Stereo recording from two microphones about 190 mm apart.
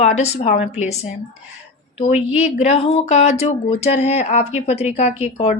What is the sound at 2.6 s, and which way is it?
A woman's voice, 35° left (ahead or behind).